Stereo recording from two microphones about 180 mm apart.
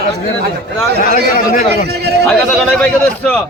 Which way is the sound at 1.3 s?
50° left (ahead or behind).